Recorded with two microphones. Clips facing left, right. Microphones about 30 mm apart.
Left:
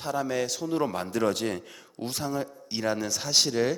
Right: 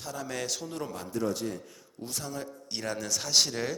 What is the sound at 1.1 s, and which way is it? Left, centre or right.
Speech, left.